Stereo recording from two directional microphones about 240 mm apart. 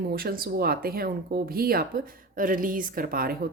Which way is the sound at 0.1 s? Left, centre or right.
Right.